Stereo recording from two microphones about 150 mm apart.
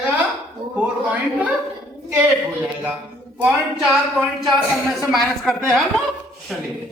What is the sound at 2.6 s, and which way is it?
A man's voice, 10° right (ahead or behind).